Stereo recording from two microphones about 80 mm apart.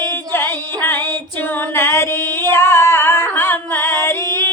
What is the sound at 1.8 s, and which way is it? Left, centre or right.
Music, left.